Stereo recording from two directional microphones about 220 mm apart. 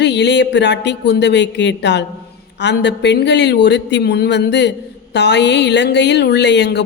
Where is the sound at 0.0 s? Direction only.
50° left (ahead or behind).